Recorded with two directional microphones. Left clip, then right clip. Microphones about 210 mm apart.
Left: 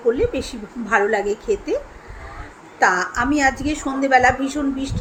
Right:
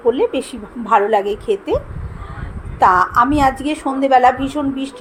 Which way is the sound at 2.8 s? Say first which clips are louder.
Right 6 dB; 10° right (ahead or behind).